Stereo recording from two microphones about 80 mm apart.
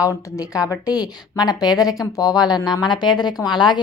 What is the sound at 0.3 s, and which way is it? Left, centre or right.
A woman's voice, left.